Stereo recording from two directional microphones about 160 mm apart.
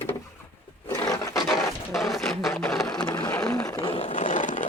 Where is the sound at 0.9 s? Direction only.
20° left (ahead or behind).